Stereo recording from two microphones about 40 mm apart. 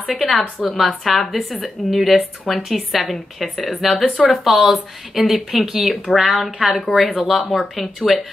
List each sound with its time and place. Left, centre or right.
0.1 s a woman's voice: centre
6.7 s a woman's voice: centre